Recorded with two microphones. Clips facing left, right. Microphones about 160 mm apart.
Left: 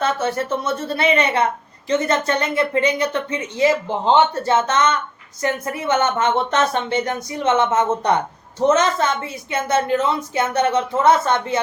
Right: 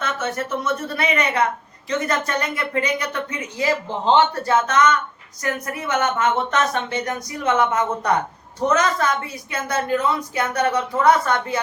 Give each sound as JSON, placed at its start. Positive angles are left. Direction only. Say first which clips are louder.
{"t": 0.0, "sound": "a woman's voice", "louder": "left 5 dB", "side_deg": 30}